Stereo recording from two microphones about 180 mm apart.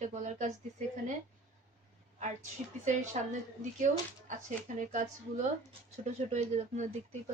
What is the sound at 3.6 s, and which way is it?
Speech, 45° right (ahead or behind).